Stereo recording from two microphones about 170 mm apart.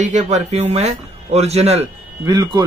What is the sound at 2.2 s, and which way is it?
Speech, 25° right (ahead or behind).